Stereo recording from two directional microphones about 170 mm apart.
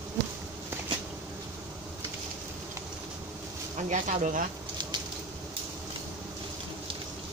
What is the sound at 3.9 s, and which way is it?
Speech, 45° right (ahead or behind).